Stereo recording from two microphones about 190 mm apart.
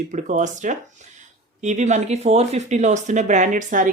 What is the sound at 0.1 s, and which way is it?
Speech, 40° right (ahead or behind).